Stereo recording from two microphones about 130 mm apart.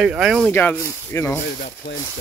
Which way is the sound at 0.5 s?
15° left (ahead or behind).